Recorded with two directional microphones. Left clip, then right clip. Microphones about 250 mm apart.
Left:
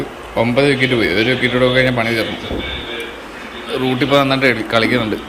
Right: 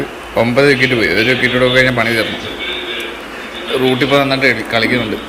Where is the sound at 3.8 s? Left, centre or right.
Centre.